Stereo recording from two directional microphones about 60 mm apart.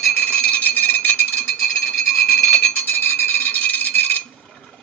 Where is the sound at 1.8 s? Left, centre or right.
Centre.